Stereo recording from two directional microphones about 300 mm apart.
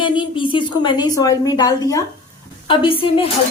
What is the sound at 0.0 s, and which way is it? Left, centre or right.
A woman's voice, centre.